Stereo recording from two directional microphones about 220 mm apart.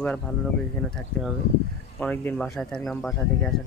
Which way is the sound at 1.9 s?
5° left (ahead or behind).